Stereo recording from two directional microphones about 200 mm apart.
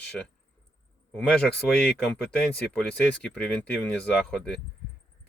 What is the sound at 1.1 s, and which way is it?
Speech, 5° left (ahead or behind).